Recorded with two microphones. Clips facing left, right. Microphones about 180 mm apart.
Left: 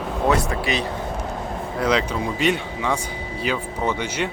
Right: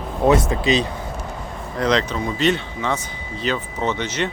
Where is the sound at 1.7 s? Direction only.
10° left (ahead or behind).